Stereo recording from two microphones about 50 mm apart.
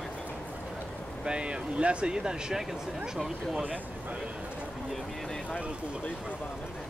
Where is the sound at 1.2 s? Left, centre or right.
Centre.